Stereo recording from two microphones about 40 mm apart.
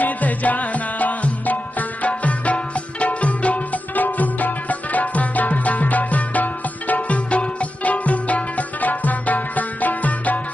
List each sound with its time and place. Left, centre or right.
0.0 s music: left